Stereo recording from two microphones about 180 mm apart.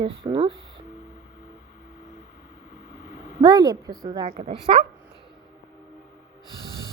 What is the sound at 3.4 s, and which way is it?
Speech, 20° right (ahead or behind).